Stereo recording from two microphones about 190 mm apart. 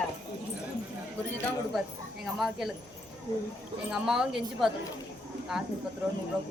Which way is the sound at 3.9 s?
5° right (ahead or behind).